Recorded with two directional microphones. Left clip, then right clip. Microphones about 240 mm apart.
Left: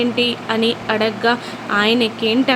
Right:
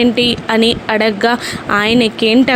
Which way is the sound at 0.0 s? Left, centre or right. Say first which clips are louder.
Right 5 dB; right.